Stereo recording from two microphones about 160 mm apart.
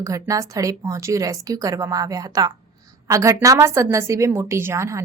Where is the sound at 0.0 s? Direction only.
20° right (ahead or behind).